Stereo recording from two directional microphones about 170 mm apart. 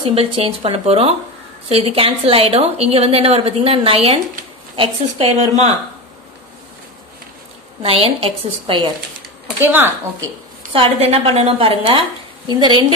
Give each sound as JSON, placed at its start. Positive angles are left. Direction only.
{"t": 0.0, "sound": "a woman's voice", "side_deg": -35}
{"t": 7.8, "sound": "a woman's voice", "side_deg": -35}
{"t": 9.6, "sound": "a woman's voice", "side_deg": -10}
{"t": 10.7, "sound": "a woman's voice", "side_deg": -35}